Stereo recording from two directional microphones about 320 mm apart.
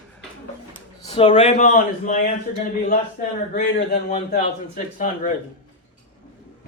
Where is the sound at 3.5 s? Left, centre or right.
Left.